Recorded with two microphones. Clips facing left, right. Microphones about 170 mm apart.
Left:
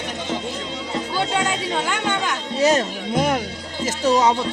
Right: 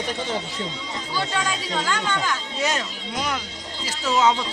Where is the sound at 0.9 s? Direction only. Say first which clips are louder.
Left 7 dB; 20° left (ahead or behind).